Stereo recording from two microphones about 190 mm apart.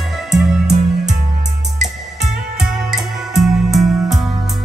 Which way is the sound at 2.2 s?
Centre (ahead or behind).